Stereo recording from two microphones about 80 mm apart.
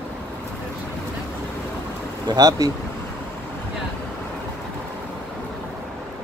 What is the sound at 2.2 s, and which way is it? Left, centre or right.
Speech, right.